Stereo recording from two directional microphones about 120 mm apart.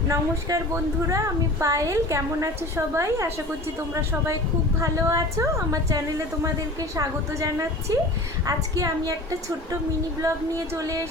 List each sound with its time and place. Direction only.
0.1 s speech: 25° right (ahead or behind)
4.8 s speech: 25° right (ahead or behind)
10.2 s speech: 25° right (ahead or behind)